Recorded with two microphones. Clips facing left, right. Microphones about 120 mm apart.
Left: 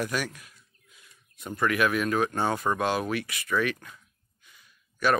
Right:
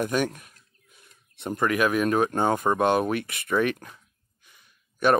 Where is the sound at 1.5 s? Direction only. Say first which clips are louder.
Right 2 dB; 20° right (ahead or behind).